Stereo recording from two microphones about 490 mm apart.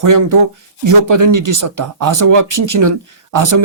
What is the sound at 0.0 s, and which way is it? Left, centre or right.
Speech, right.